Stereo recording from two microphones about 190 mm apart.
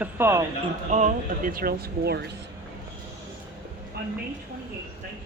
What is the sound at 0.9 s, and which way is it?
Speech, 40° right (ahead or behind).